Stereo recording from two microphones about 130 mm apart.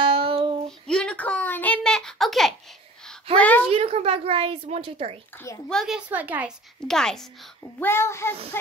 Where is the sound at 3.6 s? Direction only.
50° right (ahead or behind).